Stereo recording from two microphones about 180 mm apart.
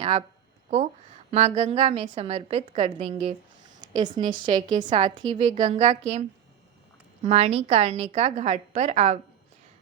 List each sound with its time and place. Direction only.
0.0 s speech: 35° right (ahead or behind)
1.3 s a woman's voice: 35° right (ahead or behind)
3.8 s a sound: 25° right (ahead or behind)
4.3 s a woman's voice: 25° right (ahead or behind)
4.6 s a woman's voice: 45° right (ahead or behind)